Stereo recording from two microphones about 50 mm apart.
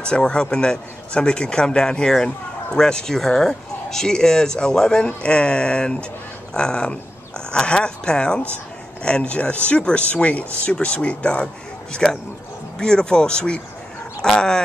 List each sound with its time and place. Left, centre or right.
0.0 s speech: centre